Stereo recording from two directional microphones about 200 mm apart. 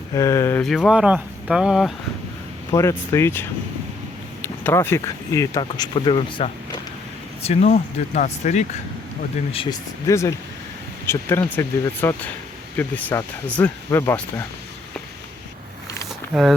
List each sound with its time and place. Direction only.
0.1 s speech: 15° left (ahead or behind)
0.6 s speech: centre (ahead or behind)
2.7 s speech: 15° left (ahead or behind)
4.4 s speech: 10° left (ahead or behind); by 9.7 s 25° left (ahead or behind)
10.1 s speech: 15° left (ahead or behind)
16.3 s speech: centre (ahead or behind)